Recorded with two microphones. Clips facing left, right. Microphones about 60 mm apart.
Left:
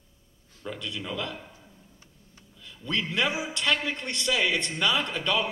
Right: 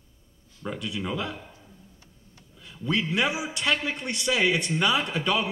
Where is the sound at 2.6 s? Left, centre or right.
Centre.